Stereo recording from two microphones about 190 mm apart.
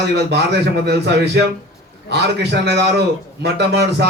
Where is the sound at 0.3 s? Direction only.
60° right (ahead or behind).